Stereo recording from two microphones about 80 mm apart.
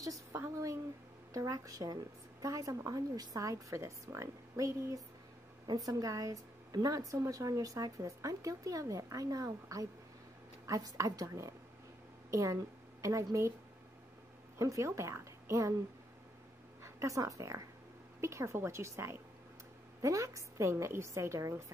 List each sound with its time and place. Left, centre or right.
0.0 s a sound: right
1.3 s a woman's voice: right
14.6 s a woman's voice: right
16.8 s a woman's voice: right
20.0 s a woman's voice: right